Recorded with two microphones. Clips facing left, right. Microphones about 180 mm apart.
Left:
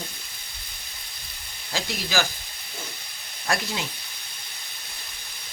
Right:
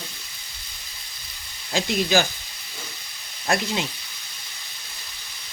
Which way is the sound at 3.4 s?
20° right (ahead or behind).